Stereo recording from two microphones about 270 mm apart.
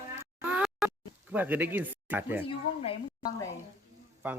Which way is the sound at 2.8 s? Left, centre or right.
Centre.